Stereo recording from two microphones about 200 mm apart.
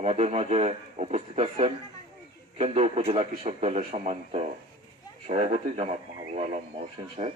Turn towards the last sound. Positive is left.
turn(degrees=-35)  # may be behind; listen again after turning